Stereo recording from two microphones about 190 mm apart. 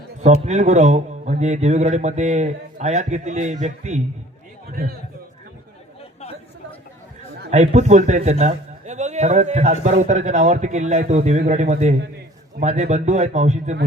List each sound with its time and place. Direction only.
0.4 s speech: 40° right (ahead or behind)
4.7 s a man's voice: 50° right (ahead or behind)
7.5 s speech: 40° right (ahead or behind)